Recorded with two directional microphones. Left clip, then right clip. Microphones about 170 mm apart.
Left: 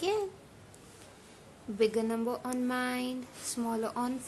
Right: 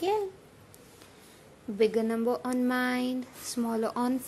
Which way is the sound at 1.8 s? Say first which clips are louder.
Right 3 dB; 20° right (ahead or behind).